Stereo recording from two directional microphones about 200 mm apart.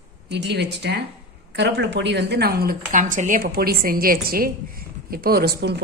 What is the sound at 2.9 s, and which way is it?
A woman's voice, 40° right (ahead or behind).